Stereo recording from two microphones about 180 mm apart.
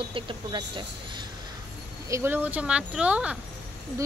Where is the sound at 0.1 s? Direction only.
25° right (ahead or behind).